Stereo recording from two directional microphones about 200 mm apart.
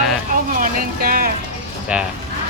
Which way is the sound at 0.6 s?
45° right (ahead or behind).